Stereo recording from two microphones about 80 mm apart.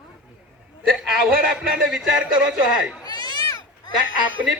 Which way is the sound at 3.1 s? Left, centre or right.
Left.